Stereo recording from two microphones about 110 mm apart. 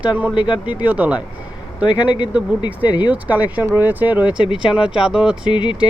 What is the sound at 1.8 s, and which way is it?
Speech, 40° left (ahead or behind).